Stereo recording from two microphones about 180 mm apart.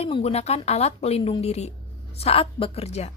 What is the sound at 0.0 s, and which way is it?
A woman's voice, 35° left (ahead or behind).